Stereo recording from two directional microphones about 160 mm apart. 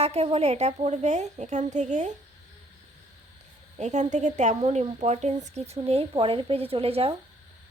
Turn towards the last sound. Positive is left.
turn(degrees=-35)  # may be behind; listen again after turning